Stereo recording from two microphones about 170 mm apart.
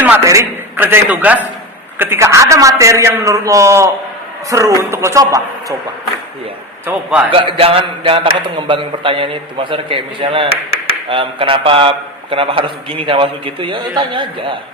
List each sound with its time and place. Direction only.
0.3 s a man's voice: 15° right (ahead or behind)
6.8 s a man's voice: 10° right (ahead or behind)
7.3 s a man's voice: 30° right (ahead or behind)